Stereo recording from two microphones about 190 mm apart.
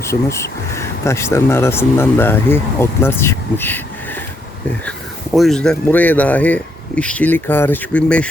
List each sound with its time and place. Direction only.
0.0 s speech: 15° left (ahead or behind)
4.9 s speech: centre (ahead or behind)